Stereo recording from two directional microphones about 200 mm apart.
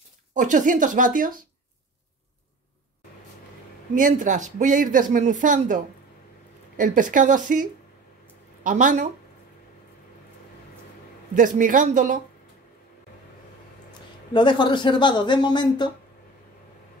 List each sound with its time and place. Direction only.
0.3 s speech: 40° right (ahead or behind)
3.9 s speech: 40° right (ahead or behind)
6.8 s speech: 40° right (ahead or behind)
8.6 s speech: 40° right (ahead or behind)
11.3 s speech: 40° right (ahead or behind)
14.3 s speech: 25° left (ahead or behind)